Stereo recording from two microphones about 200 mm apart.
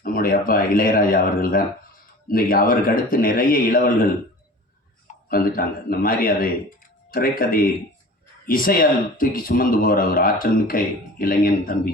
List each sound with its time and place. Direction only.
0.0 s a man's voice: 45° left (ahead or behind)
5.3 s a man's voice: 45° left (ahead or behind)